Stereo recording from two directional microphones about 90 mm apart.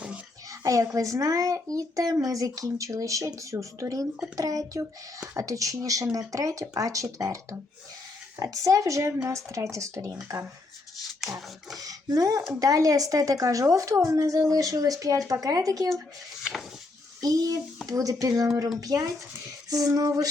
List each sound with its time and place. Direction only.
0.6 s speech: 40° right (ahead or behind)
8.4 s speech: 40° right (ahead or behind)
11.8 s speech: 45° right (ahead or behind)
17.2 s a child's voice: 45° right (ahead or behind)